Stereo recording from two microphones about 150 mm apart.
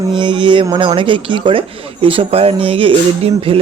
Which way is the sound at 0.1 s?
35° right (ahead or behind).